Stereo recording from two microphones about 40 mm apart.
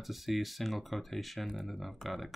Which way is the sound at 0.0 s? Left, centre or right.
Centre.